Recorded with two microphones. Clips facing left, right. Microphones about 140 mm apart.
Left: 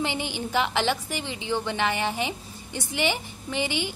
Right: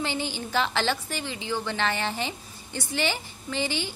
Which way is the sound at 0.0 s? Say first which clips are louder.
Left 1 dB; 15° left (ahead or behind).